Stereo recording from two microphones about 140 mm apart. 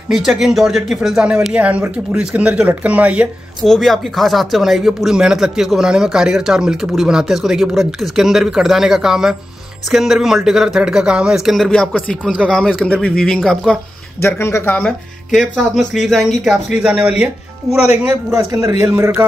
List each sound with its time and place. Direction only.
0.1 s speech: 5° right (ahead or behind)
3.6 s speech: centre (ahead or behind)
14.2 s speech: 20° left (ahead or behind)
14.9 s speech: centre (ahead or behind)
18.4 s a man's voice: 25° right (ahead or behind)
18.9 s speech: 15° right (ahead or behind)